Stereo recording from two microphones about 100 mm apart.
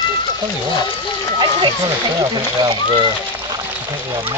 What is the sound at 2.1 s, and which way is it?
Speech, 45° right (ahead or behind).